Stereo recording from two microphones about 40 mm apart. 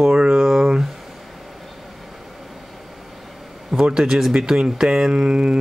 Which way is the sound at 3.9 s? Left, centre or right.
Centre.